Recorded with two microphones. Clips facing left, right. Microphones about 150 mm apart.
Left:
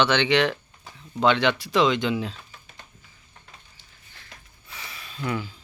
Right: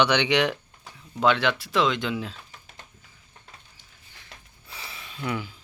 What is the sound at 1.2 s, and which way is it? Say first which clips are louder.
Speech: left 1 dB; centre (ahead or behind).